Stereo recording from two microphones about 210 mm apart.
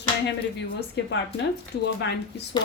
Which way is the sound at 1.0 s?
55° left (ahead or behind).